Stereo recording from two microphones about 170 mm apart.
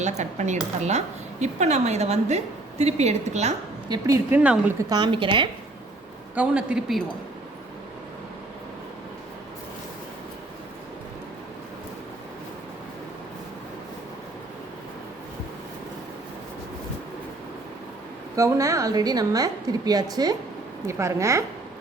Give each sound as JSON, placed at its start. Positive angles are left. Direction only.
{"t": 0.2, "sound": "speech", "side_deg": -45}
{"t": 3.8, "sound": "a woman's voice", "side_deg": -20}
{"t": 4.4, "sound": "a woman's voice", "side_deg": -10}
{"t": 4.8, "sound": "a woman's voice", "side_deg": -25}
{"t": 6.3, "sound": "a man's voice", "side_deg": -5}
{"t": 18.3, "sound": "a woman's voice", "side_deg": -20}